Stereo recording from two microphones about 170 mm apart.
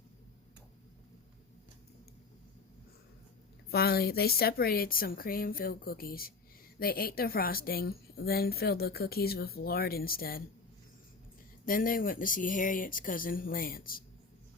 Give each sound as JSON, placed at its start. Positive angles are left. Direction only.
{"t": 3.7, "sound": "a woman's voice", "side_deg": 65}
{"t": 11.6, "sound": "a woman's voice", "side_deg": 55}